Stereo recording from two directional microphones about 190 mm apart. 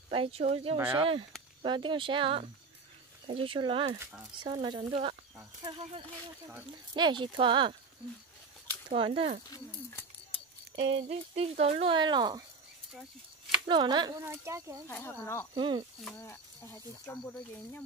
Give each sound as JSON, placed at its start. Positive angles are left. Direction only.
{"t": 0.1, "sound": "speech", "side_deg": -30}
{"t": 8.8, "sound": "speech", "side_deg": -30}
{"t": 10.8, "sound": "speech", "side_deg": -30}
{"t": 13.7, "sound": "speech", "side_deg": -25}
{"t": 14.9, "sound": "speech", "side_deg": 10}
{"t": 15.5, "sound": "speech", "side_deg": -25}
{"t": 16.0, "sound": "speech", "side_deg": 10}